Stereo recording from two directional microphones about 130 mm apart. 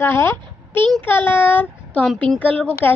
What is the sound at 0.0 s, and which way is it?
A child's voice, 15° left (ahead or behind).